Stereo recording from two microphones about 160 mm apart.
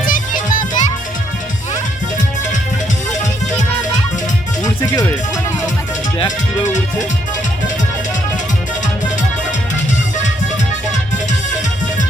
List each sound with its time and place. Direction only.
0.0 s music: 60° left (ahead or behind)
4.6 s music: 20° left (ahead or behind)